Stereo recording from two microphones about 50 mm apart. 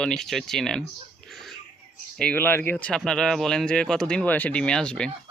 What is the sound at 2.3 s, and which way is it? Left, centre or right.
Speech, left.